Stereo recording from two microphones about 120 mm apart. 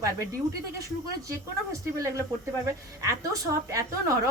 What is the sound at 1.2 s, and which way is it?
Speech, 25° right (ahead or behind).